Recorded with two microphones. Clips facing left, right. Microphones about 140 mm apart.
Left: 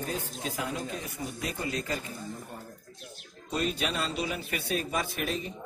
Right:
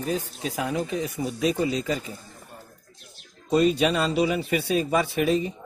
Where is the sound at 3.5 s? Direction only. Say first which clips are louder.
Right 10 dB; 90° right.